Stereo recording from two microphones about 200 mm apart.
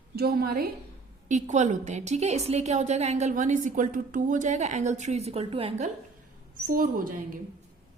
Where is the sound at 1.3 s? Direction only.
40° right (ahead or behind).